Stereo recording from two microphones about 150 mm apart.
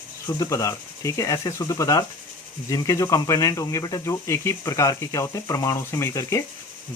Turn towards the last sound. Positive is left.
turn(degrees=20)  # may be behind; listen again after turning